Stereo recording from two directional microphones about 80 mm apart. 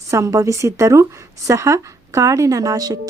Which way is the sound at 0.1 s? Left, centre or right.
Right.